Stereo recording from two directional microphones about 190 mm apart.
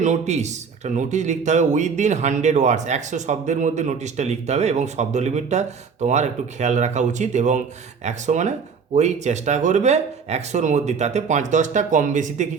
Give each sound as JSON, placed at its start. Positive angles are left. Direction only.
{"t": 0.0, "sound": "a man's voice", "side_deg": -40}